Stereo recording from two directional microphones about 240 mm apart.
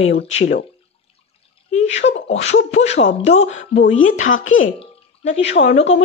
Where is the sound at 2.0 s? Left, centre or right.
Left.